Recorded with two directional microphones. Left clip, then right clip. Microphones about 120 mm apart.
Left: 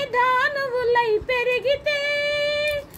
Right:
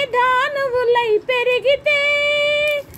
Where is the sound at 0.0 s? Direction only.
65° right (ahead or behind).